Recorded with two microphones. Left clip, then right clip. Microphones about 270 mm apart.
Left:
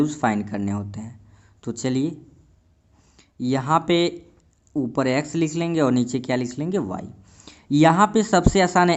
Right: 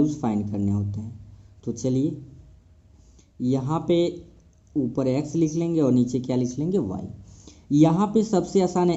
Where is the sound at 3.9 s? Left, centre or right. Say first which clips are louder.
Left 2 dB; left.